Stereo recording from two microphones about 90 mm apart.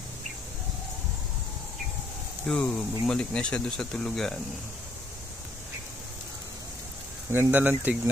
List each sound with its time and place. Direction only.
2.4 s speech: 10° left (ahead or behind)
7.2 s speech: 20° right (ahead or behind)